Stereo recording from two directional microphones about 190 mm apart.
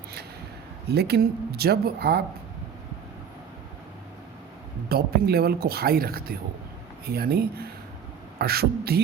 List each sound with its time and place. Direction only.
0.9 s speech: 60° right (ahead or behind)
4.9 s speech: 55° right (ahead or behind)